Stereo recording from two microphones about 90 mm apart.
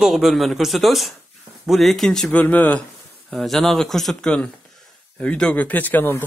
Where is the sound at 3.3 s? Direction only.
Centre (ahead or behind); by 6.2 s 20° left (ahead or behind).